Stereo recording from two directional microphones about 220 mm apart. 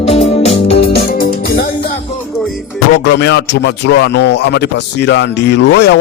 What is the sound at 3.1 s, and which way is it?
A man's voice, 50° left (ahead or behind).